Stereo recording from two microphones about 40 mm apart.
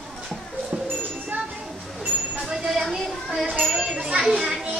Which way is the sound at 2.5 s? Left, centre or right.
Centre.